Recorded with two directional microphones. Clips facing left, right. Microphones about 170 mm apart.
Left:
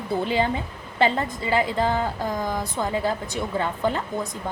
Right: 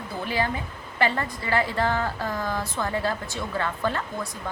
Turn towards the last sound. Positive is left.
turn(degrees=20)  # may be behind; listen again after turning